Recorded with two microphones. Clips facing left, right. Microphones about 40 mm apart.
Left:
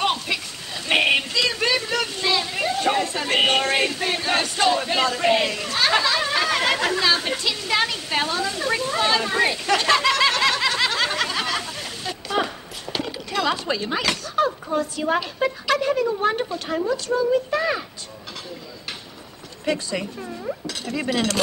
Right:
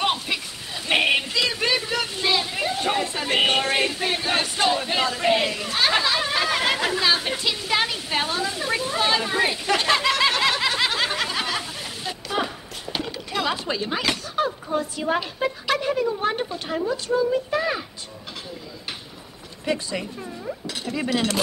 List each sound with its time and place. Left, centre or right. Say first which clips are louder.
0.0 s a sound: left 1 dB; centre
0.8 s a sound: left 1 dB; centre
1.3 s speech: left 1 dB; centre
8.1 s a sound: left 1 dB; centre
13.3 s speech: left 2 dB; centre
16.6 s speech: left 1 dB; centre
17.5 s speech: left 1 dB; centre
19.6 s speech: left 2 dB; centre
20.6 s dishes: left 1 dB; centre